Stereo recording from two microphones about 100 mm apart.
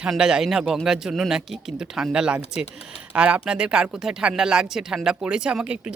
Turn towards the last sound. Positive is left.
turn(degrees=-10)  # may be behind; listen again after turning